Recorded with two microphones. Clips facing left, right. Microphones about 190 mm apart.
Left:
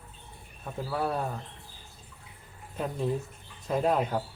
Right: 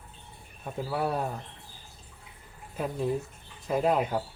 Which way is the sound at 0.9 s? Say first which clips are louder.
Right 1 dB; 15° right (ahead or behind).